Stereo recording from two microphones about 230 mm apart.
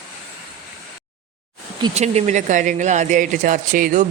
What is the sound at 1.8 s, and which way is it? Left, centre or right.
Speech, right.